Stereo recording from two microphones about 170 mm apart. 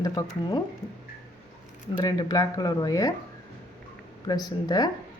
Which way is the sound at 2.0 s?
20° left (ahead or behind).